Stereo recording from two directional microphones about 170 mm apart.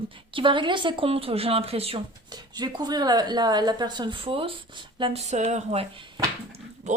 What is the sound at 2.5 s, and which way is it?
A woman's voice, 25° right (ahead or behind).